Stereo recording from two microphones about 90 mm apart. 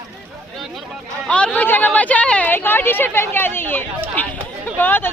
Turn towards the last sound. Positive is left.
turn(degrees=20)  # may be behind; listen again after turning